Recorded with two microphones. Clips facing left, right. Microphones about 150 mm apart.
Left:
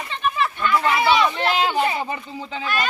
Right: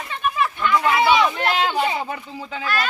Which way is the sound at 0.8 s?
Centre (ahead or behind).